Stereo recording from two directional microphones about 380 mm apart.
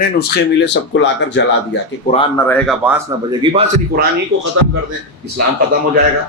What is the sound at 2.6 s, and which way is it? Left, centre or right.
A man's voice, centre.